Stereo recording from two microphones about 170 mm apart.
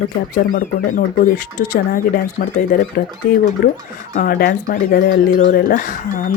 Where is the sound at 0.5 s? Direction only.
50° left (ahead or behind).